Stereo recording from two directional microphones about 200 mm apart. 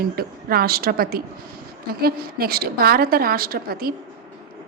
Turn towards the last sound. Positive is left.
turn(degrees=-50)  # may be behind; listen again after turning